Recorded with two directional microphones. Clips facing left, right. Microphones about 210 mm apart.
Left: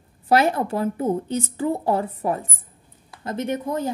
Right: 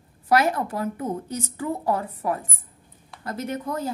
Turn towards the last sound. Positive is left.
turn(degrees=25)  # may be behind; listen again after turning